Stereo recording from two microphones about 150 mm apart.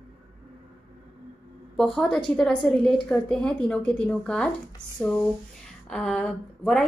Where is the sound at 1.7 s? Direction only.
5° left (ahead or behind).